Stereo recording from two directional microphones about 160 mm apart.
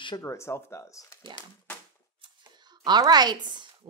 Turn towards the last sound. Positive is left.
turn(degrees=-25)  # may be behind; listen again after turning